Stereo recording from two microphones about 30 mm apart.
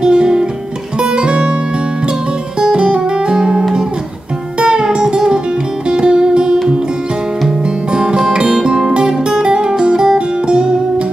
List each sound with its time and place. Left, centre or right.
0.0 s music: right
2.7 s music: right
7.9 s music: right
9.4 s music: right